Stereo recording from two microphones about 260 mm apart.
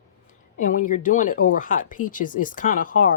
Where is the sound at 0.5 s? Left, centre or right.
Left.